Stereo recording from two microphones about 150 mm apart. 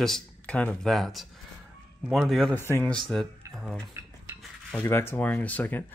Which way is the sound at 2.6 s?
15° left (ahead or behind).